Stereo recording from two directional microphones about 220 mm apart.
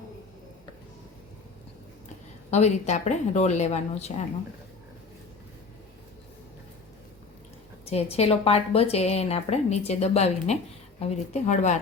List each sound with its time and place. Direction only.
2.5 s speech: 30° left (ahead or behind)
7.9 s a woman's voice: 30° left (ahead or behind)